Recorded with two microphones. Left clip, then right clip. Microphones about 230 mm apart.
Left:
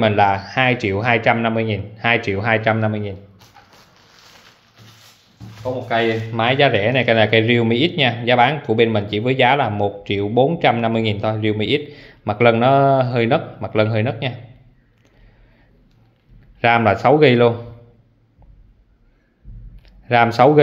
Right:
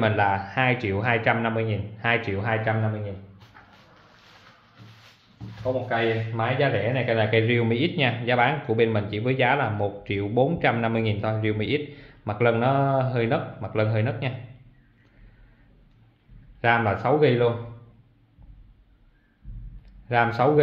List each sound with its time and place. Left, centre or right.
0.0 s a man's voice: left
3.6 s a sound: left
5.9 s a man's voice: left
16.6 s a man's voice: left
20.1 s a man's voice: left